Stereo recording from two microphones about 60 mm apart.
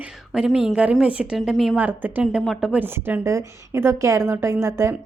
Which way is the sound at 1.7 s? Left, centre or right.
Right.